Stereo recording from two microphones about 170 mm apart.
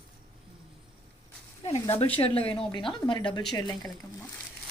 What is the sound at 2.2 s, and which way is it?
Speech, 35° left (ahead or behind).